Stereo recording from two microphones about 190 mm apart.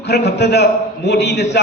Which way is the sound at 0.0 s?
65° left (ahead or behind).